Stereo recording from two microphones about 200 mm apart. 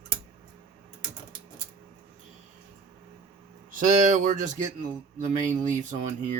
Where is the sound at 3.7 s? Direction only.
40° right (ahead or behind).